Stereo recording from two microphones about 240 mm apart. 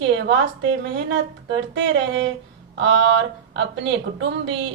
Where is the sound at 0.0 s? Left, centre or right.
Right.